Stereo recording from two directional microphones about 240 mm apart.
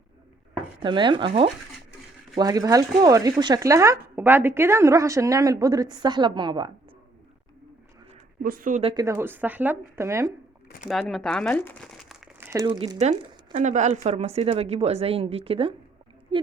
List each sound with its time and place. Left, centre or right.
0.8 s speech: centre
8.4 s speech: right; by 10.3 s centre
10.8 s speech: centre
12.5 s speech: centre